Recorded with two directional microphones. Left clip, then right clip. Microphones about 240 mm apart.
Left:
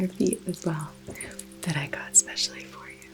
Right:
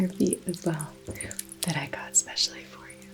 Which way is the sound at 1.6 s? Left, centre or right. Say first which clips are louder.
Even; left.